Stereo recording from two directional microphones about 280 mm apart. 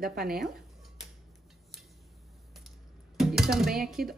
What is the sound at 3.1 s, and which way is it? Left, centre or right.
Speech, centre.